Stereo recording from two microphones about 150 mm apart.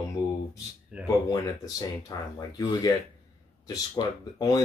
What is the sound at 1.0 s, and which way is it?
Speech, 25° left (ahead or behind).